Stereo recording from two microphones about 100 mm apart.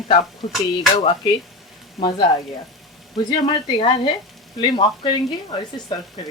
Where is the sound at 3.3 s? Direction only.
50° left (ahead or behind).